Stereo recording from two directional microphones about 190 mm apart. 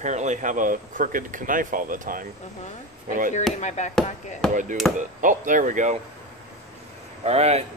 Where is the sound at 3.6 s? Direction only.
40° left (ahead or behind).